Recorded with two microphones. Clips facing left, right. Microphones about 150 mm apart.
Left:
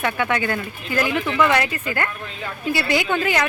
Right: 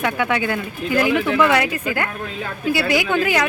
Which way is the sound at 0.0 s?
10° right (ahead or behind).